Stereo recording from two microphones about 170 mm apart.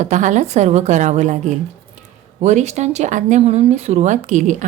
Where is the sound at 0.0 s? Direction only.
45° right (ahead or behind).